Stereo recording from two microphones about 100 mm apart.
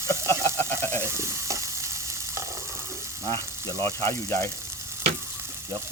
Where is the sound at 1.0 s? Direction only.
30° right (ahead or behind).